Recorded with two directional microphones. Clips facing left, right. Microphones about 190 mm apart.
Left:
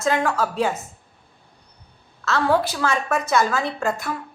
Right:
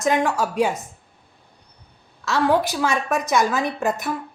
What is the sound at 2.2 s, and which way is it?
A woman's voice, 15° right (ahead or behind).